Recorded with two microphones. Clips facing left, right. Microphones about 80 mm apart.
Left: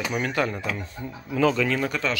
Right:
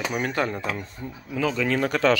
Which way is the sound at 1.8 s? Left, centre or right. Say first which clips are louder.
Right 6 dB; right.